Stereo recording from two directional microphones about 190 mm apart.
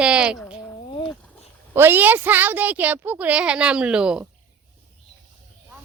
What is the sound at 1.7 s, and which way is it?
A woman's voice, 10° right (ahead or behind).